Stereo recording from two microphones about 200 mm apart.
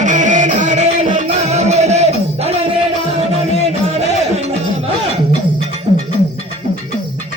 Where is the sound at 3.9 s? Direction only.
30° right (ahead or behind).